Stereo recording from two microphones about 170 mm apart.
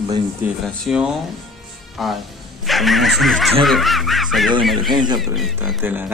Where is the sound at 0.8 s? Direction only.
5° right (ahead or behind).